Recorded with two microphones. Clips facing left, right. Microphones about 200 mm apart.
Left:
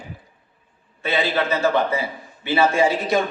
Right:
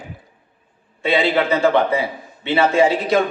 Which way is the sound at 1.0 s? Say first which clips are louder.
Right 4 dB; 15° right (ahead or behind).